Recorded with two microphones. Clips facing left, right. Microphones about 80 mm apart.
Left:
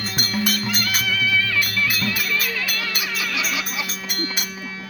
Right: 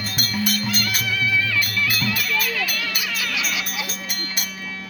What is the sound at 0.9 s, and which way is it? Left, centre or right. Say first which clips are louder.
Music: left 1 dB; centre.